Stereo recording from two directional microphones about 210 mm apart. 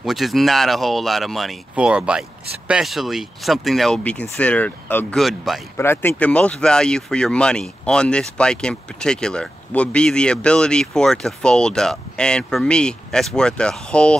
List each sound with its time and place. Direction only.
0.0 s speech: centre (ahead or behind)
5.8 s speech: 10° left (ahead or behind)